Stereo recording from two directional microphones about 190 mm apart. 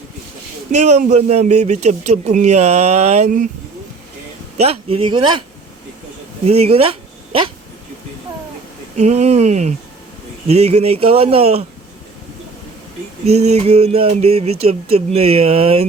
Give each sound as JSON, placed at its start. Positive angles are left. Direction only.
{"t": 0.7, "sound": "a man's voice", "side_deg": -35}
{"t": 4.5, "sound": "speech", "side_deg": -30}
{"t": 6.4, "sound": "a man's voice", "side_deg": -35}
{"t": 9.0, "sound": "a man's voice", "side_deg": -35}
{"t": 13.2, "sound": "a man's voice", "side_deg": -35}